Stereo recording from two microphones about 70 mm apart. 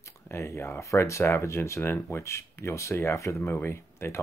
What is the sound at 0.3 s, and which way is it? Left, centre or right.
Speech, left.